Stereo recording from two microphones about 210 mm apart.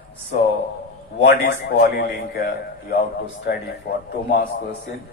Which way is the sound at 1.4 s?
45° left (ahead or behind).